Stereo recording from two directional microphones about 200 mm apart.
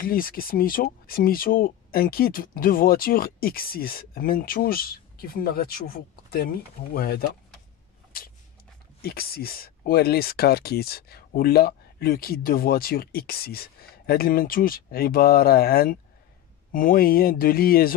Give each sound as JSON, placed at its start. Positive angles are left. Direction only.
{"t": 0.0, "sound": "speech", "side_deg": 45}
{"t": 8.1, "sound": "a sound", "side_deg": 50}
{"t": 9.0, "sound": "speech", "side_deg": 50}